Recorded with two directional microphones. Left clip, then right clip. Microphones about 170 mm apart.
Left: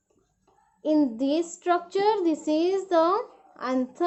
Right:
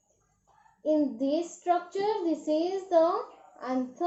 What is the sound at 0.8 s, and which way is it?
A child's voice, 35° left (ahead or behind).